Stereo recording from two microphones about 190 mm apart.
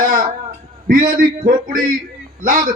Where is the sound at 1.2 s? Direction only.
45° right (ahead or behind).